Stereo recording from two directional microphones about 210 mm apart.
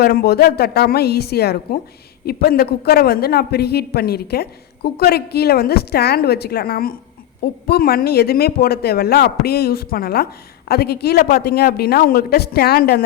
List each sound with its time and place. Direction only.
0.0 s a man's voice: 50° left (ahead or behind)